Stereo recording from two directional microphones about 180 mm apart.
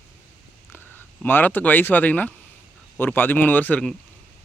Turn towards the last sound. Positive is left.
turn(degrees=10)  # may be behind; listen again after turning